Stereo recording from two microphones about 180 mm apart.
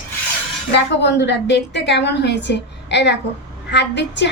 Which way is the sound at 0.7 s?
70° left (ahead or behind).